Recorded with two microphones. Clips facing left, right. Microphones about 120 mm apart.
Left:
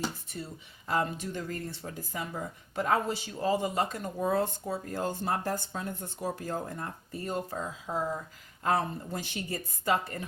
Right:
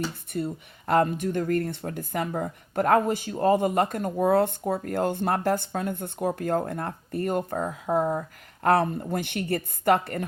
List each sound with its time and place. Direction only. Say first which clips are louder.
0.3 s speech: right 11 dB; 60° right (ahead or behind)
8.6 s speech: right 7 dB; 65° right (ahead or behind)